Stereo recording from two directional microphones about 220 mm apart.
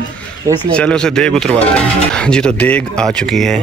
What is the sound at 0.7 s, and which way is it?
Speech, 5° left (ahead or behind).